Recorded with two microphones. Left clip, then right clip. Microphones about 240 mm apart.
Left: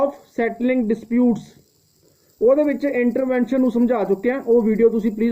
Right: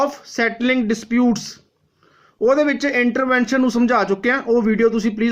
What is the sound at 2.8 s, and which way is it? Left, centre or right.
A man's voice, centre.